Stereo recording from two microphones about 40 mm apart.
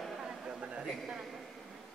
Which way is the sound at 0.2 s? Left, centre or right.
Centre.